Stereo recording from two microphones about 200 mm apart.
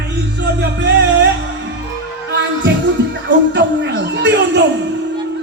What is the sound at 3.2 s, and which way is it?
Music, 60° right (ahead or behind).